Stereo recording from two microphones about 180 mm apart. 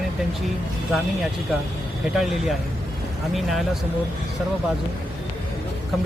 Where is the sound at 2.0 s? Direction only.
Centre (ahead or behind).